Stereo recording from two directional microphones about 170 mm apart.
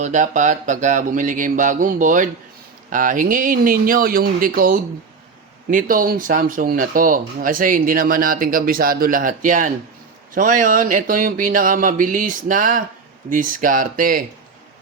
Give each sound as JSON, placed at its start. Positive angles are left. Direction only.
{"t": 0.0, "sound": "speech", "side_deg": -45}